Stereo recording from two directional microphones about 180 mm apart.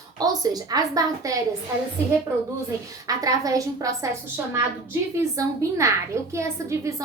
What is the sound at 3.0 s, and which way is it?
A woman's voice, 20° right (ahead or behind).